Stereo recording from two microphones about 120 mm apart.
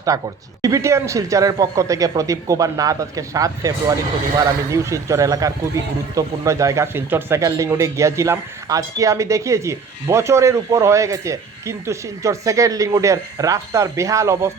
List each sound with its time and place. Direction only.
0.1 s speech: 30° right (ahead or behind)